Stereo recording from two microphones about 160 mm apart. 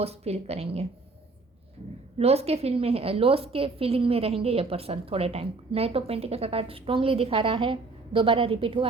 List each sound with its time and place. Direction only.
0.0 s a woman's voice: 40° right (ahead or behind)
2.1 s a woman's voice: 40° right (ahead or behind)